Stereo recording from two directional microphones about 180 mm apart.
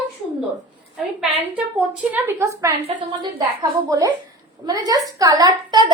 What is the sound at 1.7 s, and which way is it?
A woman's voice, 10° right (ahead or behind).